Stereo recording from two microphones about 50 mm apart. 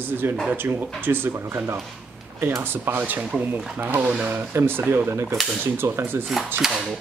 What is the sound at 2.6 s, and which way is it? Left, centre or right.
Speech, right.